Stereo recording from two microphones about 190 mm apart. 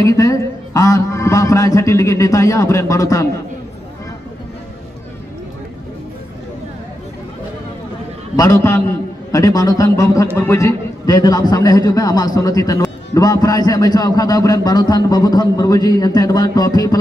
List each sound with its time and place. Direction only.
0.0 s a man's voice: 15° left (ahead or behind)
8.4 s a man's voice: 15° left (ahead or behind)